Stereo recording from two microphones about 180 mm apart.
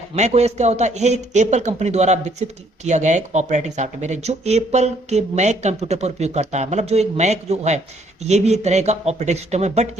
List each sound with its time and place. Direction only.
0.2 s speech: 35° right (ahead or behind)